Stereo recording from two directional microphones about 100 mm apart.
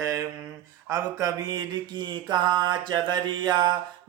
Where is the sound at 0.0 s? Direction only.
35° right (ahead or behind).